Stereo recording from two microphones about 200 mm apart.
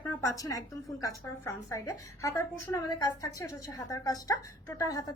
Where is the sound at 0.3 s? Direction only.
15° left (ahead or behind).